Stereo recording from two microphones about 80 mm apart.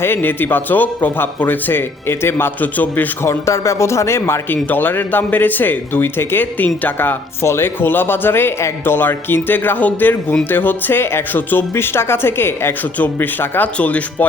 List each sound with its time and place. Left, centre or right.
0.0 s speech: left
3.2 s speech: left; by 14.3 s centre